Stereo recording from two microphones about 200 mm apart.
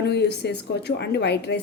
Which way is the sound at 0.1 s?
55° left (ahead or behind).